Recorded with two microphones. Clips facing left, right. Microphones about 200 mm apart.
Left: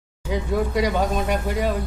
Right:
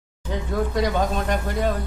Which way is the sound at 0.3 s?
10° left (ahead or behind).